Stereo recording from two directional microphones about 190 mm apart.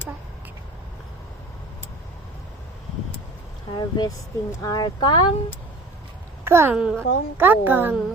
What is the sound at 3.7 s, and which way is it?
Speech, 20° left (ahead or behind).